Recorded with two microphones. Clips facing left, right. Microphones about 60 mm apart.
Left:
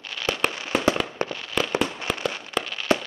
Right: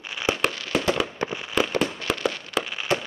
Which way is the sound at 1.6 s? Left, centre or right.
Centre.